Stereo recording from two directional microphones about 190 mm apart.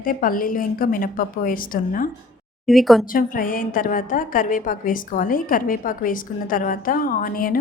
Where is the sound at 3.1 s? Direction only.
45° left (ahead or behind).